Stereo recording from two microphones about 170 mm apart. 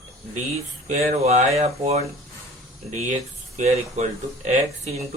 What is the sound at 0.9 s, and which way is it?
Speech, 40° right (ahead or behind).